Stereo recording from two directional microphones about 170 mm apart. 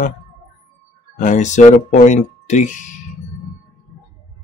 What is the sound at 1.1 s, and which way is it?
Speech, 45° left (ahead or behind).